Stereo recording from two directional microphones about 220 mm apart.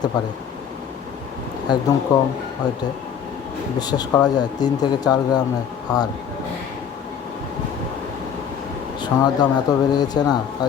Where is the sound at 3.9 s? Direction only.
20° left (ahead or behind).